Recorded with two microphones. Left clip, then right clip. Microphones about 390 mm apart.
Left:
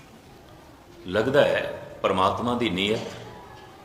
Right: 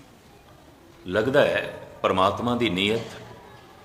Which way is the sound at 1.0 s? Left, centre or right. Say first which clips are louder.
Even; centre.